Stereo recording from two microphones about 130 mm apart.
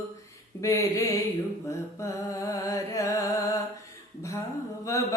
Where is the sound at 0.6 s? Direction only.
25° left (ahead or behind).